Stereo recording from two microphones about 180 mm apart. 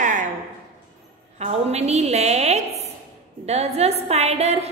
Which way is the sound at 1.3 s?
35° right (ahead or behind).